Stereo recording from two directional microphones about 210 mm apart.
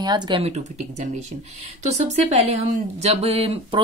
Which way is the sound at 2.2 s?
30° right (ahead or behind).